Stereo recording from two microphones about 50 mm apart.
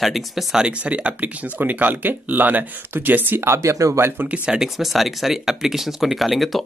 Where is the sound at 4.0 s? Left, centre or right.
Right.